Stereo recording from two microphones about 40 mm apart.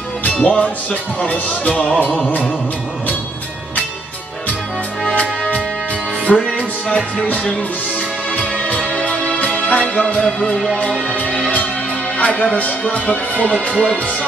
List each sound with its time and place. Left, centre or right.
0.2 s music: left
1.2 s speech: left
6.3 s music: left
9.0 s music: left
10.2 s music: centre
12.2 s music: left
12.8 s speech: left